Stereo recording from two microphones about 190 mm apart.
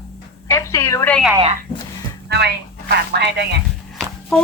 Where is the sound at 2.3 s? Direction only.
60° right (ahead or behind).